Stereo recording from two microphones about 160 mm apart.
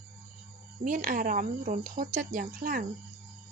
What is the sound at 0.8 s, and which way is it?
Speech, 60° right (ahead or behind).